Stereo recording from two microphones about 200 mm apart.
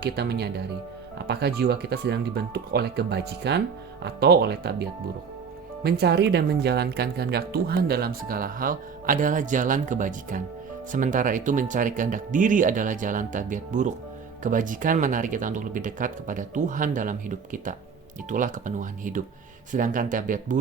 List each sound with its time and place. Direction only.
0.0 s speech: 55° right (ahead or behind)